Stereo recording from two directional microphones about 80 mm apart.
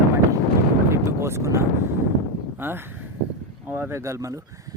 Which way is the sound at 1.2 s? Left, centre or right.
Right.